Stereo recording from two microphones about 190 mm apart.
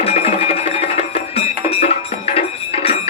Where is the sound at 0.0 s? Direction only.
30° left (ahead or behind).